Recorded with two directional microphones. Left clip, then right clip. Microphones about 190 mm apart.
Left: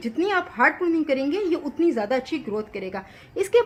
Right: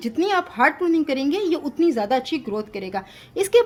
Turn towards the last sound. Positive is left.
turn(degrees=-60)  # may be behind; listen again after turning